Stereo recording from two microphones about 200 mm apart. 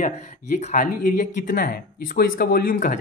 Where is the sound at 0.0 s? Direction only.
35° left (ahead or behind).